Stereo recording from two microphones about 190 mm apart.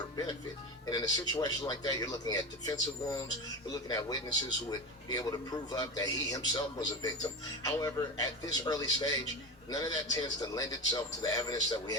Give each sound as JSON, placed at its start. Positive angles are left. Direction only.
{"t": 0.9, "sound": "a man's voice", "side_deg": 20}